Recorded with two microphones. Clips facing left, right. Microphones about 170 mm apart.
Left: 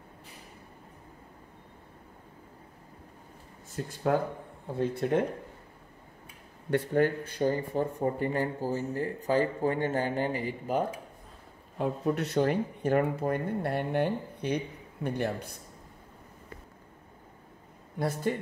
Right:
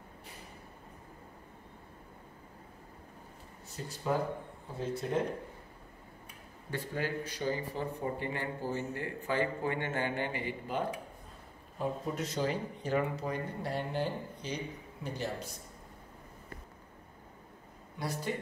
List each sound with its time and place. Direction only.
3.8 s speech: 55° left (ahead or behind)
6.7 s speech: 55° left (ahead or behind)
11.8 s speech: 65° left (ahead or behind)
17.9 s speech: 50° left (ahead or behind)